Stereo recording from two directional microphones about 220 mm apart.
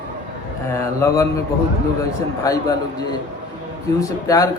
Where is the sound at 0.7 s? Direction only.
10° left (ahead or behind).